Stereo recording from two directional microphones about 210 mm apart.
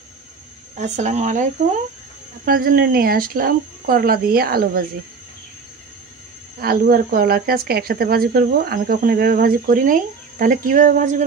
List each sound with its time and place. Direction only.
0.7 s speech: 35° right (ahead or behind)
6.6 s speech: 45° right (ahead or behind)